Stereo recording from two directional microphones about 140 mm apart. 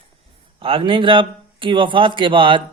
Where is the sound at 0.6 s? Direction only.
40° right (ahead or behind).